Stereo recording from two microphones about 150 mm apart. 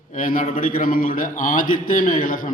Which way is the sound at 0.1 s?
65° left (ahead or behind).